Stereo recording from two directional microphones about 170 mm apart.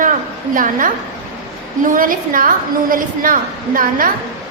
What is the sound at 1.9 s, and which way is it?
A woman's voice, 55° right (ahead or behind).